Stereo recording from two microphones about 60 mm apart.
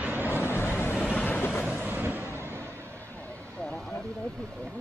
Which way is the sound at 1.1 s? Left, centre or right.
Left.